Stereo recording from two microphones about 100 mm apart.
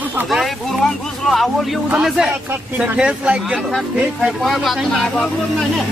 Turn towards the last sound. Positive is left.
turn(degrees=0)  # may be behind; listen again after turning